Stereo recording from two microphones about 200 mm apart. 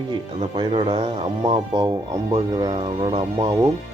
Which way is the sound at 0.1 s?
25° right (ahead or behind).